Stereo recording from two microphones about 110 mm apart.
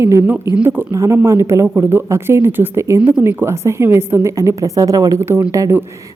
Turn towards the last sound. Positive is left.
turn(degrees=-25)  # may be behind; listen again after turning